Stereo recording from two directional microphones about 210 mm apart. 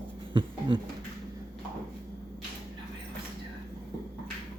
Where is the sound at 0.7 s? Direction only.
25° right (ahead or behind).